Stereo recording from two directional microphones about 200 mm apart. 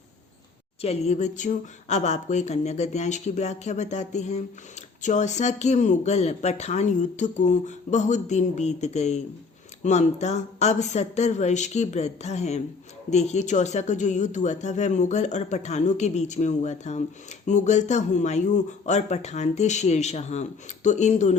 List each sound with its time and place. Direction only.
0.8 s speech: 30° left (ahead or behind)